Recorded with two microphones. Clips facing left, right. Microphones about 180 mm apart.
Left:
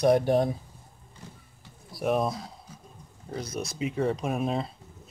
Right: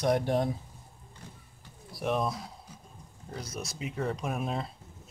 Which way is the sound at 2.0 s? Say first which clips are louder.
Left 4 dB; 40° left (ahead or behind).